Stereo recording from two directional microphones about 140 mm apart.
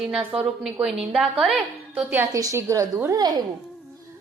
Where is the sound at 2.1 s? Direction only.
20° right (ahead or behind).